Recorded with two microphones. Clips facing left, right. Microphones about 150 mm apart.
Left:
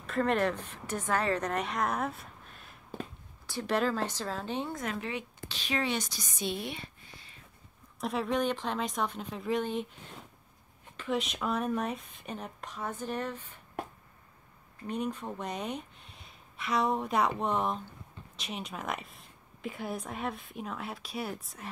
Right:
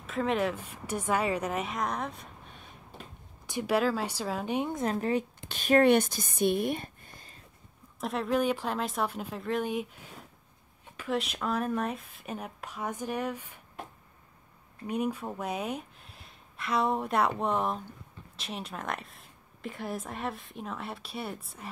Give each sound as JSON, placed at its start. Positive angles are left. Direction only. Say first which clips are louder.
{"t": 0.0, "sound": "a woman's voice", "louder": "left 1 dB", "side_deg": 0}
{"t": 3.4, "sound": "speech", "louder": "right 2 dB", "side_deg": -15}
{"t": 4.8, "sound": "speech", "louder": "right 7 dB", "side_deg": -40}
{"t": 5.5, "sound": "speech", "louder": "right 11 dB", "side_deg": -50}
{"t": 8.0, "sound": "a woman's voice", "louder": "right 2 dB", "side_deg": 0}
{"t": 14.9, "sound": "a woman's voice", "louder": "right 3 dB", "side_deg": -10}